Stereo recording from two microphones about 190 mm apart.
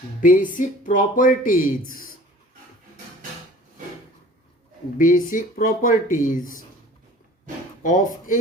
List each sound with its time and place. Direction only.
0.2 s speech: 45° left (ahead or behind)
4.9 s speech: 45° left (ahead or behind)
7.8 s speech: 45° left (ahead or behind)